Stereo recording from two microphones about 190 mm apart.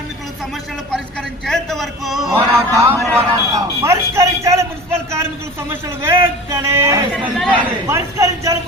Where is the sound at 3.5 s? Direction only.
15° right (ahead or behind).